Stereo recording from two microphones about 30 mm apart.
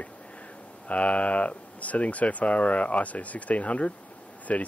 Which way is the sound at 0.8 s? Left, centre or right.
Left.